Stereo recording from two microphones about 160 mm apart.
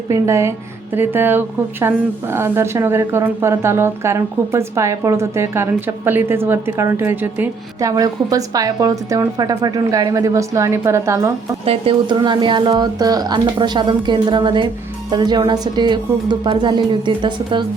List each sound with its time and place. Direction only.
0.1 s a woman's voice: 15° right (ahead or behind)
11.6 s speech: 35° right (ahead or behind)